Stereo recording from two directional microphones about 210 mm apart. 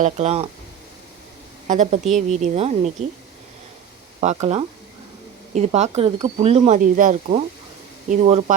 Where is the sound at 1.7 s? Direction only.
35° right (ahead or behind).